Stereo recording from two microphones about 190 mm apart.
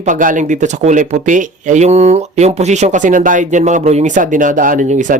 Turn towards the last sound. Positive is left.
turn(degrees=-40)  # may be behind; listen again after turning